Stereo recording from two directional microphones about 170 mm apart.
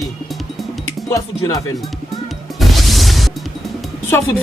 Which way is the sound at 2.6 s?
Centre (ahead or behind).